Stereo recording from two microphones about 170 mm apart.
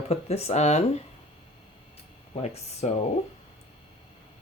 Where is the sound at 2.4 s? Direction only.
40° left (ahead or behind).